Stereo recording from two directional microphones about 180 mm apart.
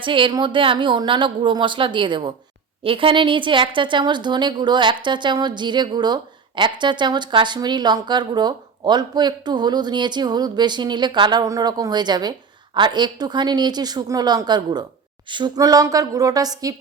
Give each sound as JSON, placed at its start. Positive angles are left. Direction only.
{"t": 0.0, "sound": "speech", "side_deg": -30}